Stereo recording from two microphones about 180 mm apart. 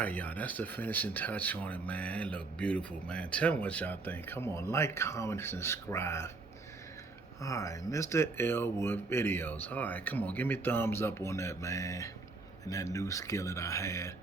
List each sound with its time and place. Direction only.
0.0 s speech: 10° left (ahead or behind)
7.4 s speech: 15° left (ahead or behind)